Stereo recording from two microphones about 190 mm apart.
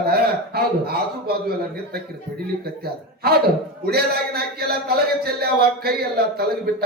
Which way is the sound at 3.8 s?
55° right (ahead or behind).